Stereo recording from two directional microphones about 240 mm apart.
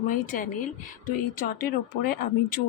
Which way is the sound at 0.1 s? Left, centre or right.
Left.